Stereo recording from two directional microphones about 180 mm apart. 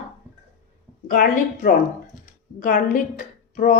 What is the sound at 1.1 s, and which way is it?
Speech, 50° left (ahead or behind).